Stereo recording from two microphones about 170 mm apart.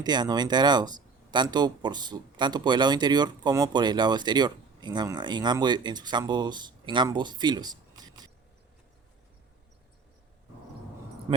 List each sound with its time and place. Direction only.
0.0 s speech: 25° right (ahead or behind)